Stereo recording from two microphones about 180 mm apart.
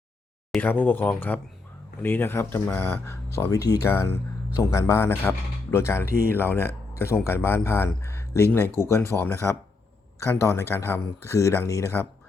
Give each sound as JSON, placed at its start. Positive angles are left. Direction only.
{"t": 0.5, "sound": "speech", "side_deg": 10}